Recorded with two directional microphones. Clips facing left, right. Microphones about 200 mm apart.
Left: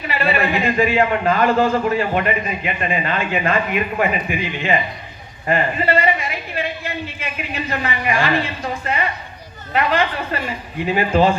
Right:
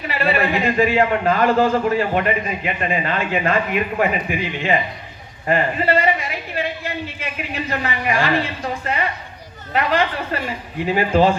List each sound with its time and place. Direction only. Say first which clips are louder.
0.0 s a man's voice: even; 40° right (ahead or behind)